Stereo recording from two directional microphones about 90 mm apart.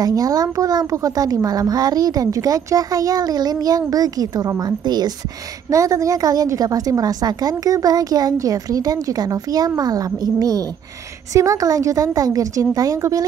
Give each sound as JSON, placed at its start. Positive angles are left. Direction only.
{"t": 0.0, "sound": "a woman's voice", "side_deg": -45}
{"t": 5.7, "sound": "a woman's voice", "side_deg": -40}